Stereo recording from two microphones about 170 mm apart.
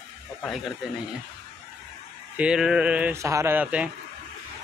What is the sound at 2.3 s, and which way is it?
Speech, 5° right (ahead or behind).